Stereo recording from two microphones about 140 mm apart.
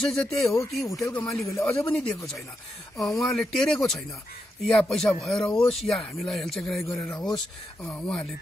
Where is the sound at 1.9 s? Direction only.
5° left (ahead or behind).